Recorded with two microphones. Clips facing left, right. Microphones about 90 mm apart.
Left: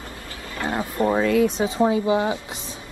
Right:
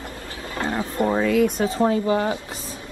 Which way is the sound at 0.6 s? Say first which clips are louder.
Left 1 dB; 15° left (ahead or behind).